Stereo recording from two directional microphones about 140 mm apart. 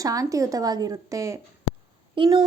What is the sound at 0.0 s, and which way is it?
Speech, 25° right (ahead or behind).